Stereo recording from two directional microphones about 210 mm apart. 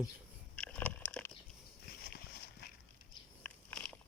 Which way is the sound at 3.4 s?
5° left (ahead or behind).